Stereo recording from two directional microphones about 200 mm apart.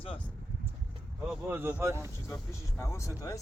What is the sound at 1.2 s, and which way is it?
Speech, centre (ahead or behind).